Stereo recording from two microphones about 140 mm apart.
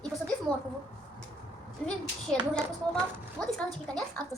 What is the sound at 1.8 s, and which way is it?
Speech, 5° left (ahead or behind).